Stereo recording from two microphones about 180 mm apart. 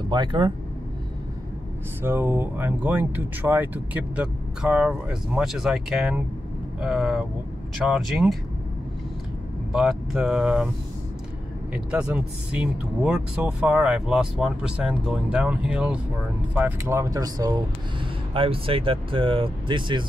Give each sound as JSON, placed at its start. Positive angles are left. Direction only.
{"t": 0.1, "sound": "speech", "side_deg": -25}
{"t": 2.0, "sound": "speech", "side_deg": -10}
{"t": 9.7, "sound": "speech", "side_deg": 0}
{"t": 11.7, "sound": "speech", "side_deg": -5}
{"t": 18.3, "sound": "speech", "side_deg": -30}